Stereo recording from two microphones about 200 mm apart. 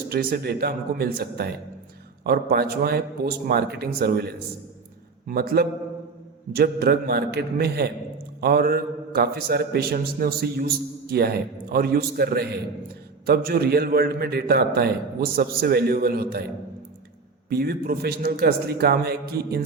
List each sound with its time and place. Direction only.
0.1 s a man's voice: 50° right (ahead or behind)
17.5 s a man's voice: 50° right (ahead or behind)